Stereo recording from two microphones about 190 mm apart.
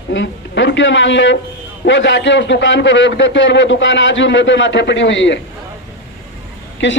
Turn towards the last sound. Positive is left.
turn(degrees=70)  # may be behind; listen again after turning